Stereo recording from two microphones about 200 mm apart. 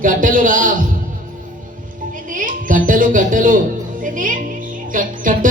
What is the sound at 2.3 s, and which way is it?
Music, 40° right (ahead or behind).